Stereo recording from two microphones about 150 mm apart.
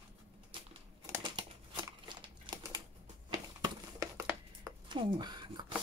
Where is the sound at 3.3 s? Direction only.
25° right (ahead or behind).